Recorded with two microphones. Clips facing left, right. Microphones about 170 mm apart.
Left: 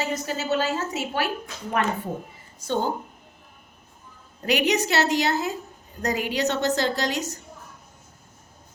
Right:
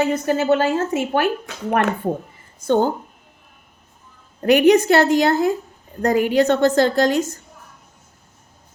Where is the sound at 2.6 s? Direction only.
55° right (ahead or behind).